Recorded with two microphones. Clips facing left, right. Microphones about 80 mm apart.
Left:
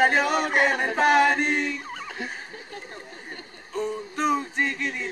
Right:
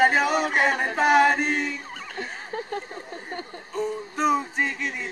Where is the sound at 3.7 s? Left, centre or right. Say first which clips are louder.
Even; centre.